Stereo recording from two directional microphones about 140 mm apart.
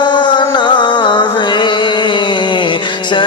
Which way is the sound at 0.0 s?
35° left (ahead or behind).